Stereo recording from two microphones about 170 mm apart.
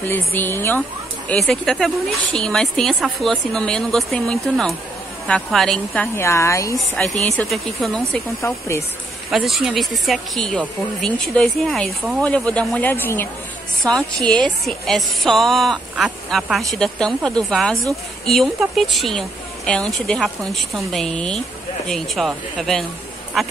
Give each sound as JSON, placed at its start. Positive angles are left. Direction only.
{"t": 0.0, "sound": "speech", "side_deg": 10}
{"t": 1.3, "sound": "a woman's voice", "side_deg": 0}
{"t": 6.1, "sound": "a woman's voice", "side_deg": 15}
{"t": 9.3, "sound": "a woman's voice", "side_deg": 0}